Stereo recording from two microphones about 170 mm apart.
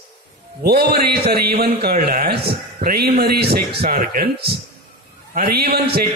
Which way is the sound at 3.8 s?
60° right (ahead or behind).